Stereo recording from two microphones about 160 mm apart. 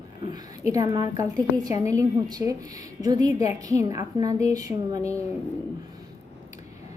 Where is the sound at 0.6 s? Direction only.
20° right (ahead or behind).